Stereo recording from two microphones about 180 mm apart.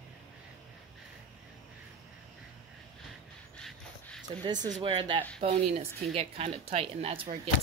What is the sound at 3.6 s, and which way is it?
Dog, 5° left (ahead or behind).